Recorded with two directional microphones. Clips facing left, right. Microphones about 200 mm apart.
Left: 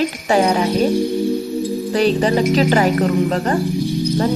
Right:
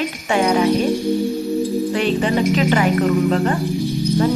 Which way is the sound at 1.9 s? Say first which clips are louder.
Left 3 dB; 35° left (ahead or behind).